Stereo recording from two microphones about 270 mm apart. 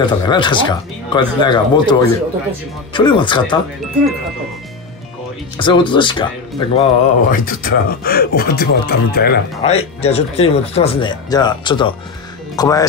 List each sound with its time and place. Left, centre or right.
0.0 s speech: centre
5.6 s speech: centre; by 9.4 s left
9.6 s speech: left